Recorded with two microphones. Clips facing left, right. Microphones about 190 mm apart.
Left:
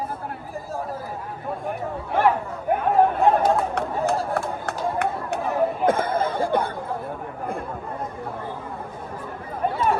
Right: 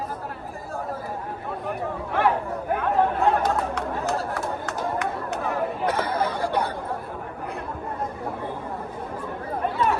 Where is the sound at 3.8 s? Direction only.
55° left (ahead or behind).